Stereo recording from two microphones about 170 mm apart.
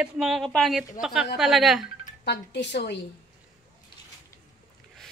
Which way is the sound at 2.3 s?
85° left.